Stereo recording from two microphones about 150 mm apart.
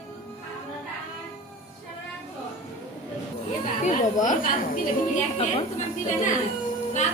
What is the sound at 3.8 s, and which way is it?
A woman's voice, 60° left (ahead or behind).